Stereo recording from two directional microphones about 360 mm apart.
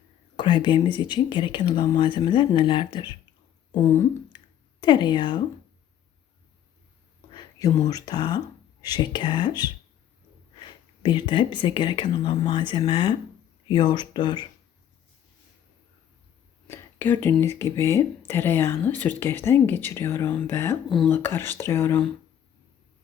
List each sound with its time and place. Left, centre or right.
0.3 s speech: centre
7.3 s speech: centre
11.0 s speech: centre
16.6 s a sound: centre
17.6 s speech: centre